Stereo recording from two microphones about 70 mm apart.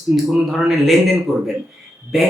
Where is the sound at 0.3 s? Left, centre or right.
Centre.